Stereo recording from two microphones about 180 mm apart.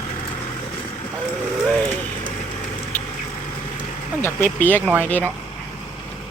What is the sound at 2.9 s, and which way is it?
Vehicle, 10° left (ahead or behind).